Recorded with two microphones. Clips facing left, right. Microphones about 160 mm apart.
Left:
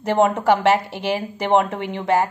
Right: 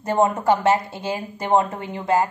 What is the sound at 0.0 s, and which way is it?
A woman's voice, 80° left.